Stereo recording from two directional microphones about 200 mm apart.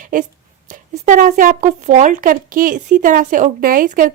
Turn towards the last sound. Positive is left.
turn(degrees=-45)  # may be behind; listen again after turning